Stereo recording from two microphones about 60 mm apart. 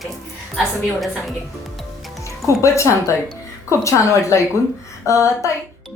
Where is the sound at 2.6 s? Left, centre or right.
Left.